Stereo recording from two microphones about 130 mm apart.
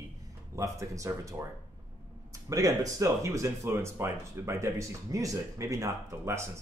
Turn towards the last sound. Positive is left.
turn(degrees=-20)  # may be behind; listen again after turning